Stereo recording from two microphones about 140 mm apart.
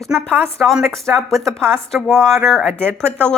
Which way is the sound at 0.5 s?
Centre (ahead or behind).